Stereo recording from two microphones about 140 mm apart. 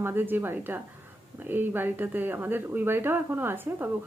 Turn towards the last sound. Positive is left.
turn(degrees=-15)  # may be behind; listen again after turning